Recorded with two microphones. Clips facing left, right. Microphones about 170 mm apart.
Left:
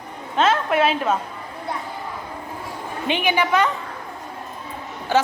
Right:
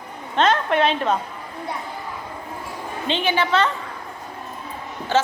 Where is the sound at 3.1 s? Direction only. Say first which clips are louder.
Left 1 dB; 15° left (ahead or behind).